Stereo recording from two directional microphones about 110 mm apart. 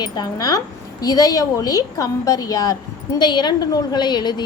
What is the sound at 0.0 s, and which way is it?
A woman's voice, 35° left (ahead or behind).